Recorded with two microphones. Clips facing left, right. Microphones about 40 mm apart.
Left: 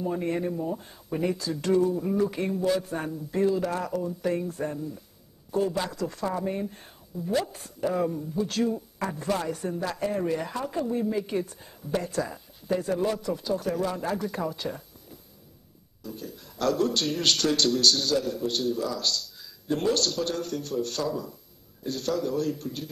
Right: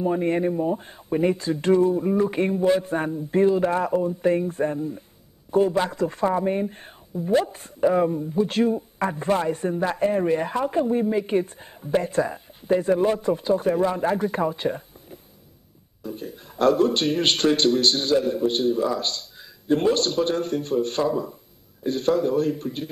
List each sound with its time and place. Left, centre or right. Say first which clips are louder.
0.0 s speech: right 6 dB; right